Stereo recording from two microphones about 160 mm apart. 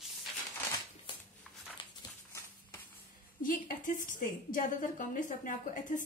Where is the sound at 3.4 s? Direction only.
60° left (ahead or behind).